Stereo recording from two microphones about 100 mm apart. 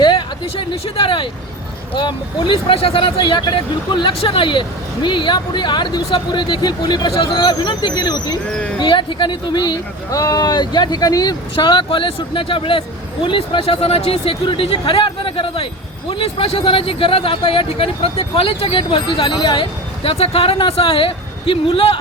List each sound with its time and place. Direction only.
0.0 s a sound: 50° left (ahead or behind)
0.5 s speech: 65° left (ahead or behind); by 8.4 s 45° left (ahead or behind)
8.4 s speech: 10° left (ahead or behind)
8.8 s speech: 55° left (ahead or behind)
11.5 s speech: 55° left (ahead or behind)
20.0 s speech: 80° left